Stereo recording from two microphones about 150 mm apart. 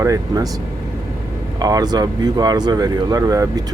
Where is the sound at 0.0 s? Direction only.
25° right (ahead or behind).